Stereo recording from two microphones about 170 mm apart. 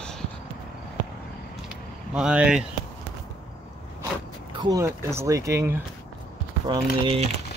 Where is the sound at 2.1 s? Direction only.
5° right (ahead or behind).